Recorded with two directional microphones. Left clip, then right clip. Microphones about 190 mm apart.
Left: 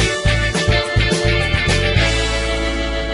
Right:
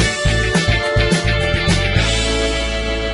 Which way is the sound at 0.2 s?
Centre (ahead or behind).